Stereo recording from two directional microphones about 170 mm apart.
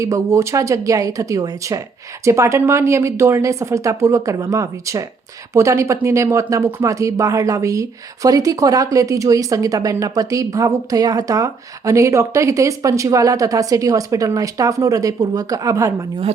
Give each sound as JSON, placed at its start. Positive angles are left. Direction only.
{"t": 0.0, "sound": "speech", "side_deg": -20}